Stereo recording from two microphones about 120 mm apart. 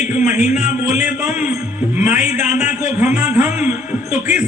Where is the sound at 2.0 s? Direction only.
90° left.